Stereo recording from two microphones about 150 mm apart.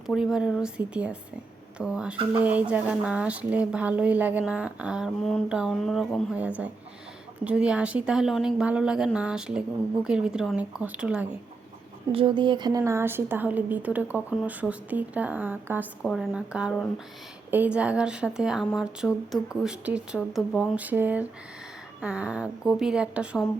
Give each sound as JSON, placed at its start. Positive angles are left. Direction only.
{"t": 0.1, "sound": "speech", "side_deg": -5}
{"t": 12.1, "sound": "speech", "side_deg": -35}
{"t": 16.0, "sound": "speech", "side_deg": 0}